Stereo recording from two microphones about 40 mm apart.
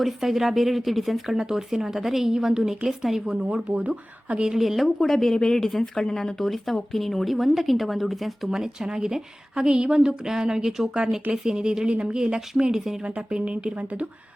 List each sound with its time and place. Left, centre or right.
0.0 s a woman's voice: centre
1.4 s a woman's voice: centre
3.4 s speech: right
4.5 s a woman's voice: centre
4.9 s speech: centre
6.4 s a woman's voice: centre
8.4 s a woman's voice: centre; by 14.1 s right